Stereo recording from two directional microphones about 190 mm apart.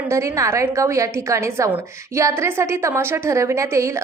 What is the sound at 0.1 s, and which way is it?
A woman's voice, 15° right (ahead or behind).